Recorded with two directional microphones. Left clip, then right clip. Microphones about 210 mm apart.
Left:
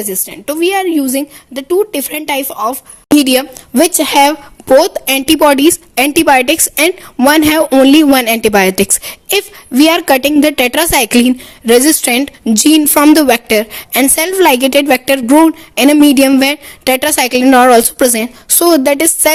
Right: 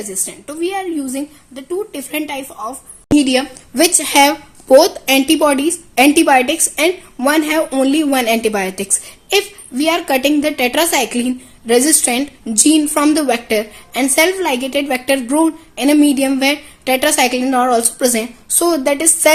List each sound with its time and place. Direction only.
0.4 s a woman's voice: 50° left (ahead or behind)
3.8 s a woman's voice: 35° left (ahead or behind)